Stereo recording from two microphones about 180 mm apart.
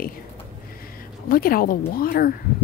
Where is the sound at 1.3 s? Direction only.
55° left (ahead or behind).